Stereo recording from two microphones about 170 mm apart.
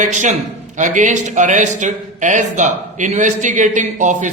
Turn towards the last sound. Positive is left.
turn(degrees=-45)  # may be behind; listen again after turning